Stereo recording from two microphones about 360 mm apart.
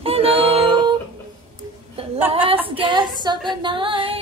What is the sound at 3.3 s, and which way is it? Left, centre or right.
Music, centre.